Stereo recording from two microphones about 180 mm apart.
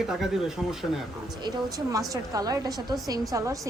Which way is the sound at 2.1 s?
20° right (ahead or behind).